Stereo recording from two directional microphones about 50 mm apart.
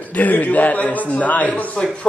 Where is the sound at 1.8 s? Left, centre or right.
Centre.